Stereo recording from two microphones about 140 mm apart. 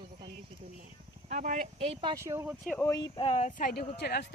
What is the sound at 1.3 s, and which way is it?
Speech, 65° right (ahead or behind).